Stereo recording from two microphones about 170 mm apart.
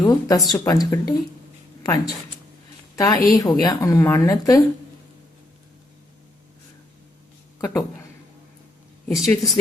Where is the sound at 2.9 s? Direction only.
20° left (ahead or behind).